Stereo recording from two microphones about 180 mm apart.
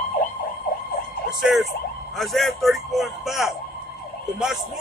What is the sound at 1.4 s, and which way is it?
Emergency vehicle, centre (ahead or behind).